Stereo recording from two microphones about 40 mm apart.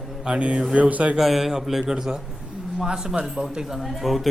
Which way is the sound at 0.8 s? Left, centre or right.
Right.